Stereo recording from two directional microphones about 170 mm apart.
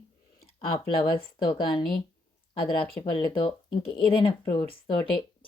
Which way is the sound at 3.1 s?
30° left (ahead or behind).